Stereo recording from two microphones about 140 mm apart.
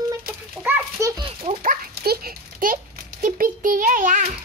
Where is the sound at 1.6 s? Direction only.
90° right; by 4.2 s 65° right (ahead or behind).